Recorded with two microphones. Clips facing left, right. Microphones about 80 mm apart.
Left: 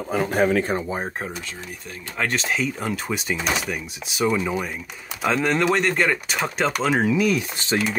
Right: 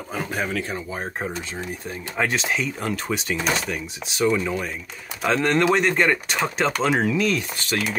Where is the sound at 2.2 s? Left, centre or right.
Centre.